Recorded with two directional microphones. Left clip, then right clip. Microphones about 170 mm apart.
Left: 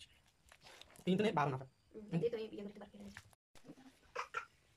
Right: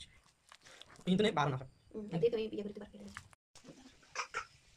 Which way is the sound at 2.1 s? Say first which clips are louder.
Right 6 dB; 10° right (ahead or behind).